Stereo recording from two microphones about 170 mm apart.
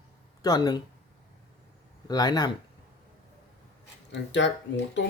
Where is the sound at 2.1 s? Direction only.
25° left (ahead or behind).